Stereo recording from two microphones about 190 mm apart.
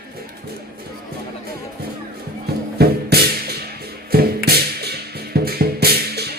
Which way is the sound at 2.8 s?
55° right (ahead or behind).